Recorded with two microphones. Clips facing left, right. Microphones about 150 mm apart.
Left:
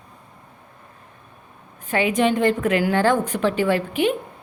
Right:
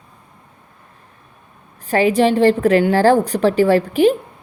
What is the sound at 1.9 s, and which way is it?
Speech, 35° right (ahead or behind).